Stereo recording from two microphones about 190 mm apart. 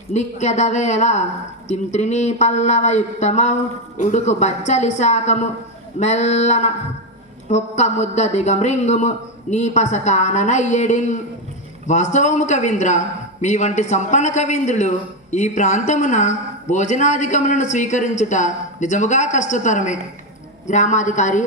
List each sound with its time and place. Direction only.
0.1 s a man's voice: 35° left (ahead or behind)